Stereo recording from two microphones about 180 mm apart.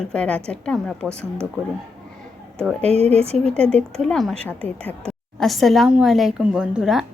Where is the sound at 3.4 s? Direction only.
5° left (ahead or behind).